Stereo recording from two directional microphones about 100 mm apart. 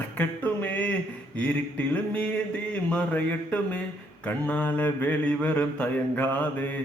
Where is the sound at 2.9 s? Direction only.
15° left (ahead or behind).